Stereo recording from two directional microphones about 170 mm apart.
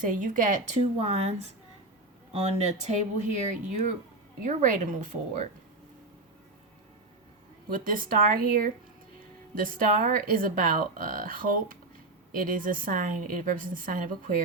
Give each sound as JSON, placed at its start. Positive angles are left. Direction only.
{"t": 0.0, "sound": "a woman's voice", "side_deg": -50}
{"t": 7.7, "sound": "a woman's voice", "side_deg": -55}